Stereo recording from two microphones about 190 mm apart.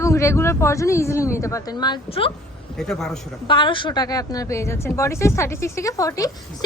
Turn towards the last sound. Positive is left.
turn(degrees=15)  # may be behind; listen again after turning